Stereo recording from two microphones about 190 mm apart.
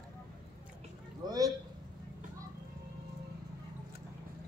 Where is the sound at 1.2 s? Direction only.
20° right (ahead or behind).